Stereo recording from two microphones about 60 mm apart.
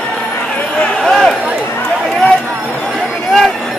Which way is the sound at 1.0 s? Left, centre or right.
Centre.